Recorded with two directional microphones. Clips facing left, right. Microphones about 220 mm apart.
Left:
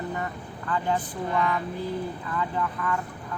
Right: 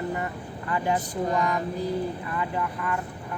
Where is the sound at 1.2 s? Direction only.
40° right (ahead or behind).